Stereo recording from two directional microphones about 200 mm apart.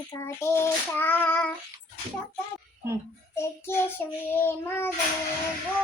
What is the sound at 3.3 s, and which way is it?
Child singing, 10° left (ahead or behind).